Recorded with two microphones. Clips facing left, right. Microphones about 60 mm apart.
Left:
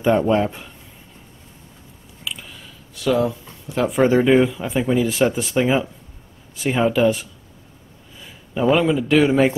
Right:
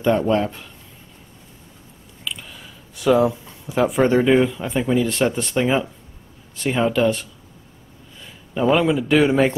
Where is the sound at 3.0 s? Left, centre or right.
Centre.